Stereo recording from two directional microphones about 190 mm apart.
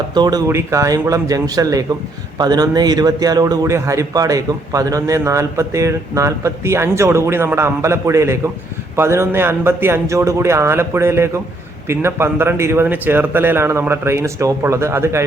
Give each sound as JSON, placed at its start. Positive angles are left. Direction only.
{"t": 0.1, "sound": "a man's voice", "side_deg": -20}